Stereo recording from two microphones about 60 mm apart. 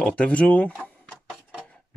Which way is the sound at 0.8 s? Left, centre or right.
Left.